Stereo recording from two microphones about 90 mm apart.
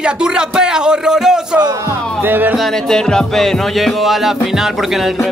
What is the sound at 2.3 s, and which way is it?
Speech, 20° right (ahead or behind).